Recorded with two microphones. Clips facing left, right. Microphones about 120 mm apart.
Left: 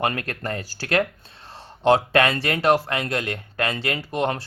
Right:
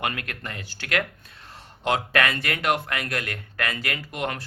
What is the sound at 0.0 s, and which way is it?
Speech, 35° left (ahead or behind).